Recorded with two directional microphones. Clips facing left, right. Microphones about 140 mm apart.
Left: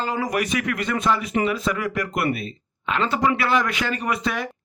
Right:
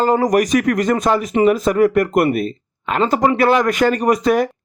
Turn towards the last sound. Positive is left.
turn(degrees=-45)  # may be behind; listen again after turning